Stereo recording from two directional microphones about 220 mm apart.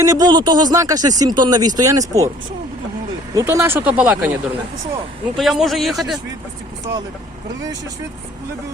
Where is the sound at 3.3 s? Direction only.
10° right (ahead or behind).